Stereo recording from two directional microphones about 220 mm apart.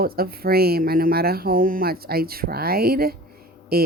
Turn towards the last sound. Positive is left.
turn(degrees=-45)  # may be behind; listen again after turning